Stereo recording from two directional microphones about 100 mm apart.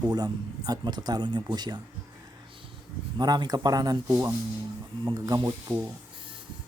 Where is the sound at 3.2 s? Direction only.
45° right (ahead or behind).